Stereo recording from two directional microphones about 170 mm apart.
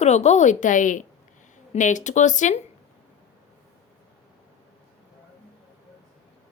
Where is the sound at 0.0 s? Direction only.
40° left (ahead or behind).